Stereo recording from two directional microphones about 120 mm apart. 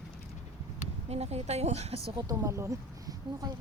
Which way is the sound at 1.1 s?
60° right (ahead or behind).